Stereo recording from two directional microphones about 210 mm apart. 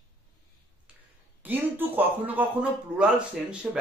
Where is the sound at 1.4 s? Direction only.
10° right (ahead or behind).